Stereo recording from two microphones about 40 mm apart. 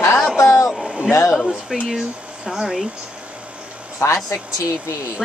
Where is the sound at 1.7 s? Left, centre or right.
Right.